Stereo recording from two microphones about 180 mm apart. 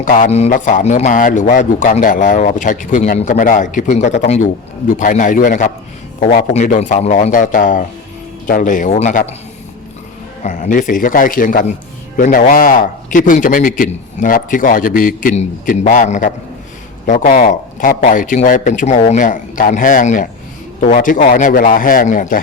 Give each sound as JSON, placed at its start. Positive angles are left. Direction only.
{"t": 0.0, "sound": "a man's voice", "side_deg": 45}
{"t": 10.4, "sound": "a man's voice", "side_deg": 45}